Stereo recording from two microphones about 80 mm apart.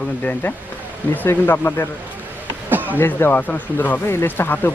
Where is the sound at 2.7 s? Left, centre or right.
Right.